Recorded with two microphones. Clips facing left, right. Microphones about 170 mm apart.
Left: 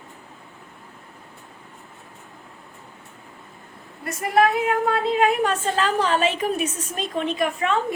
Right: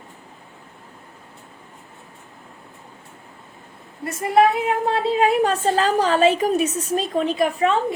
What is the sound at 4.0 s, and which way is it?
A woman's voice, 30° right (ahead or behind).